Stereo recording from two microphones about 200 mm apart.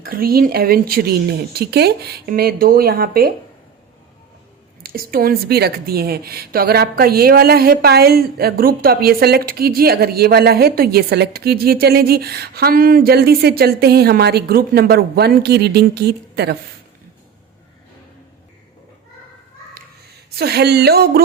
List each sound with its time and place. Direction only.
0.0 s speech: 45° right (ahead or behind)
4.8 s speech: 45° right (ahead or behind)
20.3 s speech: 55° right (ahead or behind)